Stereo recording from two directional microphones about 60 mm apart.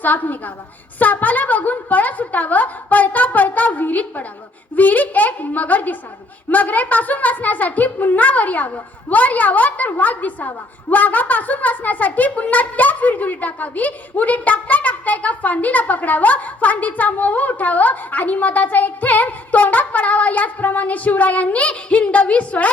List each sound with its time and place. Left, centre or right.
0.0 s a woman's voice: left